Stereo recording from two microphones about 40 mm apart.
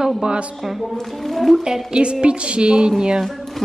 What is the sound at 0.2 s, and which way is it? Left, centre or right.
Speech, right.